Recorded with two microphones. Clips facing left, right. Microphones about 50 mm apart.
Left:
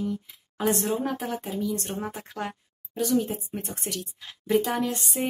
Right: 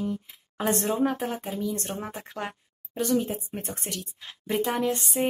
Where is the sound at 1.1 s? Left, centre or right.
Centre.